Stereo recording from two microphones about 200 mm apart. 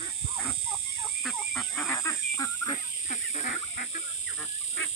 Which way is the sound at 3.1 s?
40° left (ahead or behind).